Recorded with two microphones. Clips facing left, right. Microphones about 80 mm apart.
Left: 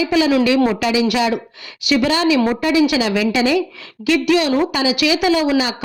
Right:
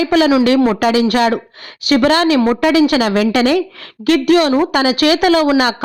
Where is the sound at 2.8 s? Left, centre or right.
Right.